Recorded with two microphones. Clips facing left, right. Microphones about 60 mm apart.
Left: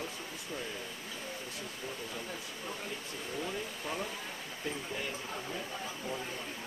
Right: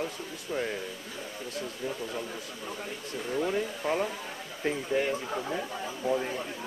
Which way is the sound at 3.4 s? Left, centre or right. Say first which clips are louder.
Right 10 dB; right.